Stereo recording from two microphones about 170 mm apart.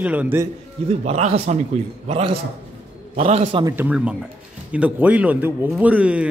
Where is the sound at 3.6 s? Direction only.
10° right (ahead or behind).